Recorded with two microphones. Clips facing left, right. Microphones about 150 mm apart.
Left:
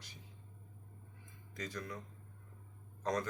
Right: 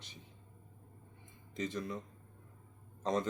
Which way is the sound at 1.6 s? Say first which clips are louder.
Right 5 dB; 25° right (ahead or behind).